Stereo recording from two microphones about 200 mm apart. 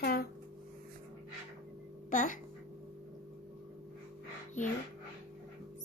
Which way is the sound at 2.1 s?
40° left (ahead or behind).